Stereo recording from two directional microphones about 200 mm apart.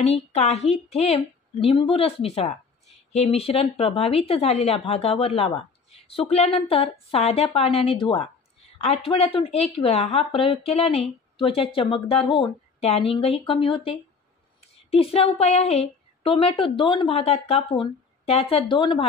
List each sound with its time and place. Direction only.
0.0 s a woman's voice: 35° left (ahead or behind)